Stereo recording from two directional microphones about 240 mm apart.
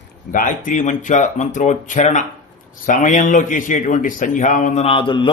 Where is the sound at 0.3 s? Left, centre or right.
Left.